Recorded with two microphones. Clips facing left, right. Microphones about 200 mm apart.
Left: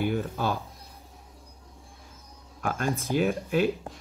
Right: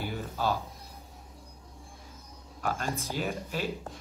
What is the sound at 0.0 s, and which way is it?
Speech, 55° left (ahead or behind).